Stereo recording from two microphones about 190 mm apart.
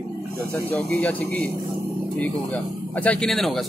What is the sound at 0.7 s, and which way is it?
Speech, 5° left (ahead or behind).